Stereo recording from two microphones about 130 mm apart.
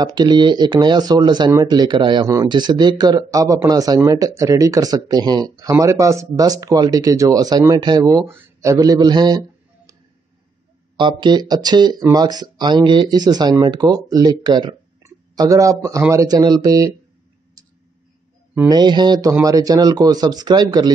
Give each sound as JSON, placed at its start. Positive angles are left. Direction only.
{"t": 0.0, "sound": "speech", "side_deg": -35}
{"t": 8.1, "sound": "speech", "side_deg": -20}
{"t": 11.0, "sound": "speech", "side_deg": -35}
{"t": 15.0, "sound": "speech", "side_deg": -25}
{"t": 18.7, "sound": "speech", "side_deg": -35}